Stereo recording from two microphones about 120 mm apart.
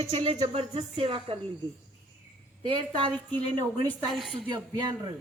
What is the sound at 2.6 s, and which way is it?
Speech, 45° right (ahead or behind).